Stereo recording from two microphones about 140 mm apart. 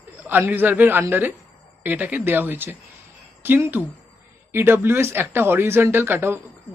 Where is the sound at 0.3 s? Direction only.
15° right (ahead or behind).